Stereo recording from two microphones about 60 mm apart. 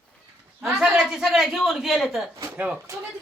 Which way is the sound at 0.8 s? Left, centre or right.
Centre.